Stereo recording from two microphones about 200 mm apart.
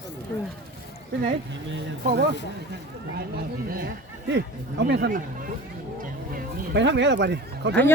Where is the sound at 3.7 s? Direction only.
55° right (ahead or behind).